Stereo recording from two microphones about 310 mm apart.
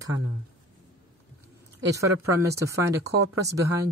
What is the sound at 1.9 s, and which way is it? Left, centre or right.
Speech, centre.